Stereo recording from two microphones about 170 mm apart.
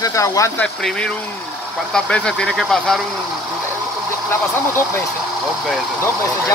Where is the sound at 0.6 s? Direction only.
5° left (ahead or behind).